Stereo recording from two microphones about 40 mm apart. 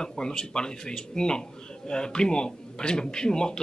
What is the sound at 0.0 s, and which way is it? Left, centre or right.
Speech, centre.